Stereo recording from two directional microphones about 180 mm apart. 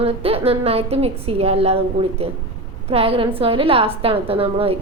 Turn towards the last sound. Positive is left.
turn(degrees=-30)  # may be behind; listen again after turning